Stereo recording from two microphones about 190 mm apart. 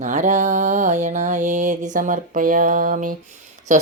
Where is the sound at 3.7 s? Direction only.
40° right (ahead or behind).